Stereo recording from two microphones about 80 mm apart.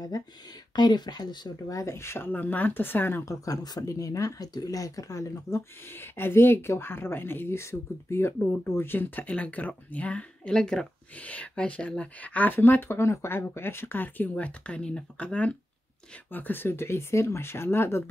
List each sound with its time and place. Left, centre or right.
0.7 s speech: left
1.8 s speech: left
3.3 s speech: left